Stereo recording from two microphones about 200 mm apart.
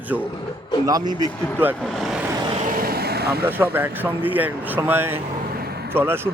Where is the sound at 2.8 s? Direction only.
50° right (ahead or behind).